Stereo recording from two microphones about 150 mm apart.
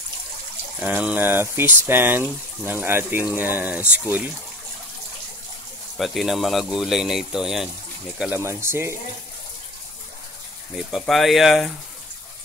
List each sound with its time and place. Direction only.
0.7 s speech: 10° right (ahead or behind)
5.9 s speech: centre (ahead or behind)
8.4 s speech: 15° right (ahead or behind)
10.8 s speech: centre (ahead or behind)